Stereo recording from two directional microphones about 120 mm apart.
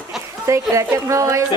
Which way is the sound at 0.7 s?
25° right (ahead or behind).